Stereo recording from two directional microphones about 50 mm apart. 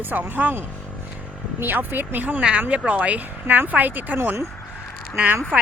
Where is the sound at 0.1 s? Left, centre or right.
Right.